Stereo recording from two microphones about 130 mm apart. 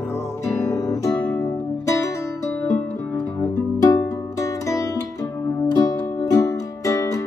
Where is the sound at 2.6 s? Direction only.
10° left (ahead or behind).